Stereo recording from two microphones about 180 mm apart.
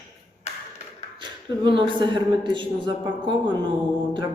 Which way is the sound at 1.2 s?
25° right (ahead or behind).